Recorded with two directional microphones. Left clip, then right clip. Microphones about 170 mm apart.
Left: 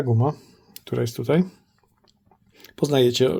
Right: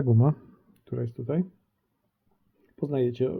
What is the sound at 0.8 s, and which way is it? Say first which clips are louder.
Speech: left 9 dB; 5° left (ahead or behind).